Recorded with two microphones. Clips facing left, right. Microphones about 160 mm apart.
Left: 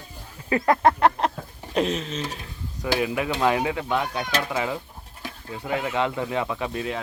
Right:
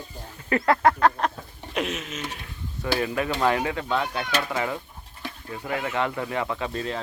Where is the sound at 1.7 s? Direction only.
35° left (ahead or behind).